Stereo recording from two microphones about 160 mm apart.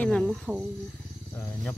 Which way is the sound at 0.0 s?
5° left (ahead or behind).